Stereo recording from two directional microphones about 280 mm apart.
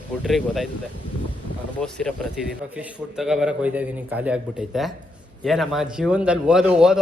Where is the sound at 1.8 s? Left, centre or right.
Centre.